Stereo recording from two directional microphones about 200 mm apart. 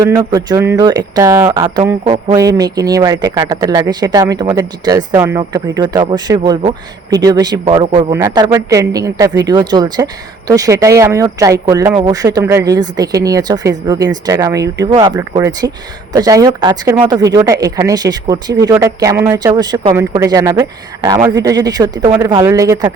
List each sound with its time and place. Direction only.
0.3 s speech: 20° right (ahead or behind)